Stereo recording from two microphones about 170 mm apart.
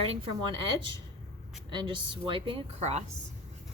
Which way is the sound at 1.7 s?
30° right (ahead or behind).